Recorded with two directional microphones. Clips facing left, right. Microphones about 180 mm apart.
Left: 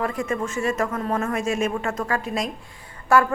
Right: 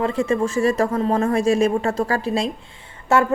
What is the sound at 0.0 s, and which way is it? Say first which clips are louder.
A woman's voice: right 5 dB; 25° right (ahead or behind).